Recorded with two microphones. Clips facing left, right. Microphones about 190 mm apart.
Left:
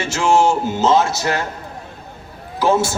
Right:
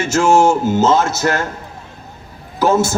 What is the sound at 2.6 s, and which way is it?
Speech, 45° right (ahead or behind).